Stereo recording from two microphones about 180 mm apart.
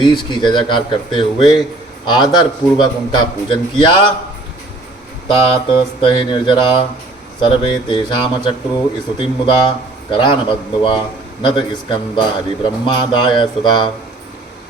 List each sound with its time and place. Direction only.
0.0 s a man's voice: 25° left (ahead or behind)
5.3 s a man's voice: 25° left (ahead or behind)